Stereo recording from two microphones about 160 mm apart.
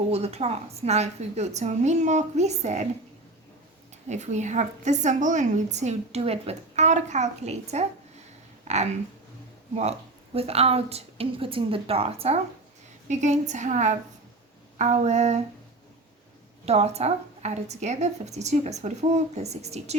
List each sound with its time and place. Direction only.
0.1 s a woman's voice: 40° right (ahead or behind)
4.1 s a woman's voice: 45° right (ahead or behind)
10.3 s a woman's voice: 40° right (ahead or behind)
16.6 s a woman's voice: 40° right (ahead or behind)